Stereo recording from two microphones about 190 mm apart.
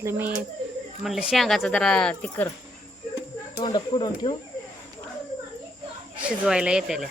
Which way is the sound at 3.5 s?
20° left (ahead or behind).